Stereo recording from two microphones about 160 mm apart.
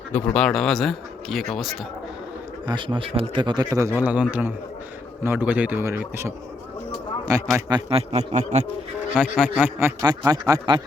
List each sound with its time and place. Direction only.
0.1 s speech: 10° left (ahead or behind)
2.6 s a man's voice: 30° right (ahead or behind)
7.9 s speech: 40° right (ahead or behind)
9.6 s a man's voice: 15° right (ahead or behind)